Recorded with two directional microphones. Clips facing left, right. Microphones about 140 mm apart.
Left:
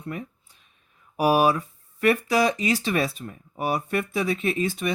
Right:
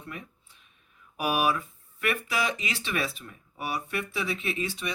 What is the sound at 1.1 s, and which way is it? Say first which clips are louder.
Speech: left 7 dB; 35° left (ahead or behind).